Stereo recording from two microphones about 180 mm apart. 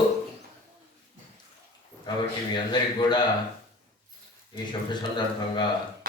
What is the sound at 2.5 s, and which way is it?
Speech, 25° left (ahead or behind).